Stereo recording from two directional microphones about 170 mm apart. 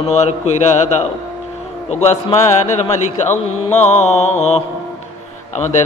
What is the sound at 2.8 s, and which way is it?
Speech, 40° left (ahead or behind).